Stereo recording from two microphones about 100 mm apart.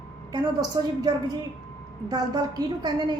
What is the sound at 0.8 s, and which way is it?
Speech, 45° right (ahead or behind).